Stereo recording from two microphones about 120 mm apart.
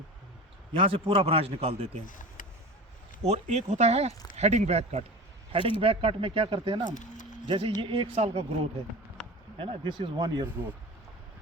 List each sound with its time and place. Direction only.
0.8 s speech: 50° right (ahead or behind)
2.0 s a sound: 90° left
3.2 s speech: 70° right (ahead or behind)
5.5 s speech: 45° right (ahead or behind)
6.9 s a sound: 90° left
7.4 s speech: 45° right (ahead or behind); by 8.4 s 60° right (ahead or behind)
9.6 s speech: 45° right (ahead or behind)
10.4 s speech: 15° right (ahead or behind)